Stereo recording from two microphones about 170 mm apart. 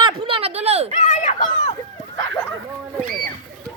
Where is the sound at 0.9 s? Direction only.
40° left (ahead or behind).